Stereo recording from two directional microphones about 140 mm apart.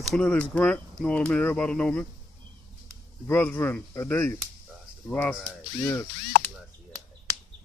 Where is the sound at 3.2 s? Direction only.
15° left (ahead or behind).